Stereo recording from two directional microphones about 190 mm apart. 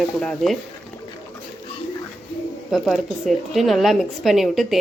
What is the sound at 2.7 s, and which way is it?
A woman's voice, centre (ahead or behind).